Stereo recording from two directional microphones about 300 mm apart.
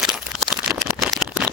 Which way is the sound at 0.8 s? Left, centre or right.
Centre.